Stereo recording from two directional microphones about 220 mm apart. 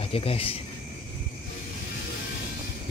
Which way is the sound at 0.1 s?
25° left (ahead or behind).